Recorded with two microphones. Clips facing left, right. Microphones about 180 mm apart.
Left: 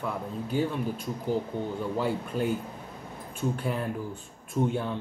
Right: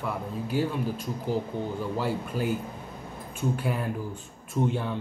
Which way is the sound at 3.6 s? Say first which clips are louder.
Right 1 dB; 5° right (ahead or behind).